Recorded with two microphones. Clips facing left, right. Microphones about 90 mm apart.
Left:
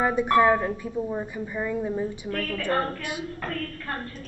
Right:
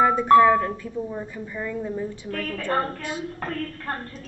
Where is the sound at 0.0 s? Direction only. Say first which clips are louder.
Right 5 dB; 15° left (ahead or behind).